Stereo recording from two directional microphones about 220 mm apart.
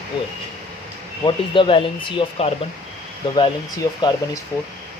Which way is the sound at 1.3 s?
20° left (ahead or behind).